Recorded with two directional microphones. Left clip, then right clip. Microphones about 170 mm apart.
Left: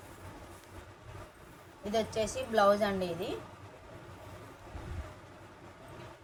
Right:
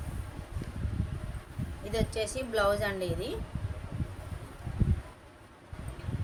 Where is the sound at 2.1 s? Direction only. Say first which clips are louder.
Even; 55° right (ahead or behind).